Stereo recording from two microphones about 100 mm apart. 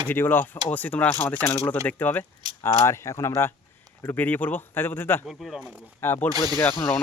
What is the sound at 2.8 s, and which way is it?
Speech, 30° left (ahead or behind).